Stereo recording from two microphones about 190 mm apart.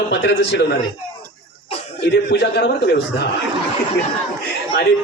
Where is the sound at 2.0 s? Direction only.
60° left (ahead or behind).